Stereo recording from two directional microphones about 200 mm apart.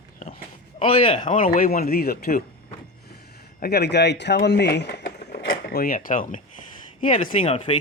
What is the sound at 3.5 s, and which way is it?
Speech, 55° left (ahead or behind).